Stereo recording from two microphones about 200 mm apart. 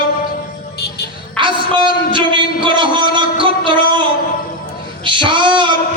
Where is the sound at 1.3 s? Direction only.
25° right (ahead or behind).